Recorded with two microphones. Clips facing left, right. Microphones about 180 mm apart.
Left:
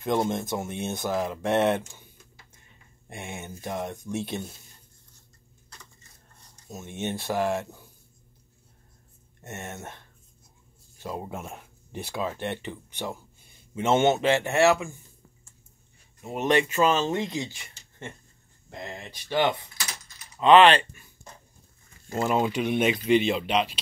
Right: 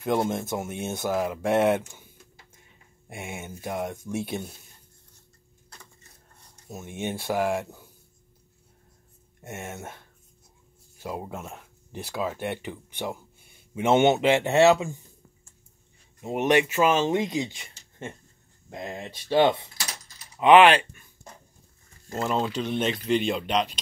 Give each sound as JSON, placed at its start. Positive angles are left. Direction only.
{"t": 0.0, "sound": "speech", "side_deg": -5}
{"t": 3.1, "sound": "speech", "side_deg": -10}
{"t": 6.7, "sound": "speech", "side_deg": -10}
{"t": 9.4, "sound": "speech", "side_deg": -10}
{"t": 11.2, "sound": "speech", "side_deg": 5}
{"t": 16.2, "sound": "speech", "side_deg": -15}
{"t": 20.3, "sound": "speech", "side_deg": -10}
{"t": 22.1, "sound": "speech", "side_deg": 10}